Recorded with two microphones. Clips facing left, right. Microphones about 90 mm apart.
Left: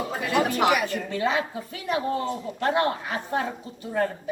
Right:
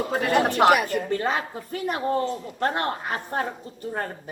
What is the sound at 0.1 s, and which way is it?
A woman's voice, 55° right (ahead or behind).